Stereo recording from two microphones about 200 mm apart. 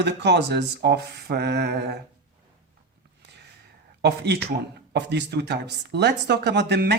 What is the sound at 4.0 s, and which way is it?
Speech, 55° right (ahead or behind).